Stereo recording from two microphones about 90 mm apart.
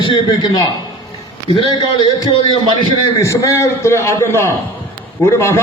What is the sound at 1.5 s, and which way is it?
Speech, 90° left.